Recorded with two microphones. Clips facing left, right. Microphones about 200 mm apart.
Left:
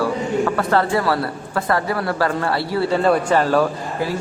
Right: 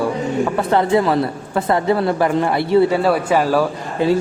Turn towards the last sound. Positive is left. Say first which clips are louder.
# right 7 dB
turn(degrees=-25)  # may be behind; listen again after turning